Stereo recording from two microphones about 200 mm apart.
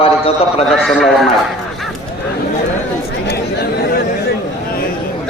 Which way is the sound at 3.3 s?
55° left (ahead or behind).